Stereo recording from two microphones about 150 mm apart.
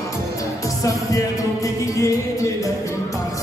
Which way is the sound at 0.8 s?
20° left (ahead or behind).